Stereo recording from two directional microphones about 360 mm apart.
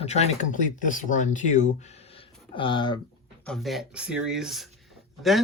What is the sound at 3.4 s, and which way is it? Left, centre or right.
Speech, centre.